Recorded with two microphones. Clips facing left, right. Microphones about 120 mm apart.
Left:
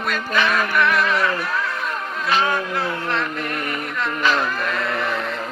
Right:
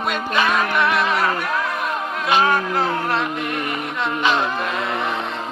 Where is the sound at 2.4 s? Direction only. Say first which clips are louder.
Right 3 dB; 25° right (ahead or behind).